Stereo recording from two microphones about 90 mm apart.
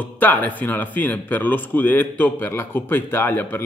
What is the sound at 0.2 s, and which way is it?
A man's voice, 20° left (ahead or behind).